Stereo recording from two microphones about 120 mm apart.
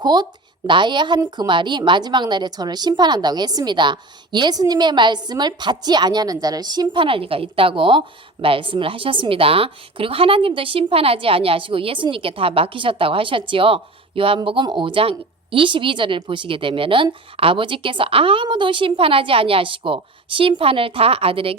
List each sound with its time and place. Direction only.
0.0 s a woman's voice: 35° right (ahead or behind)